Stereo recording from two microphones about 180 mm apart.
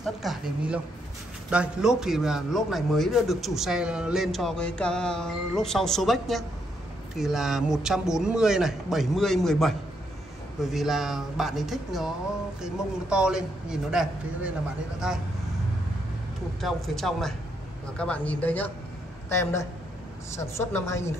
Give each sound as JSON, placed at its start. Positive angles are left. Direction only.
{"t": 0.0, "sound": "a man's voice", "side_deg": 0}
{"t": 16.6, "sound": "a man's voice", "side_deg": 0}